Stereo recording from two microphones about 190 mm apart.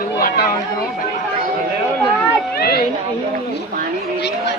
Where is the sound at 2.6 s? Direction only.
55° left (ahead or behind).